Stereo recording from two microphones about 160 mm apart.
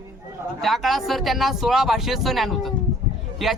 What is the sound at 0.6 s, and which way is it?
Speech, centre (ahead or behind).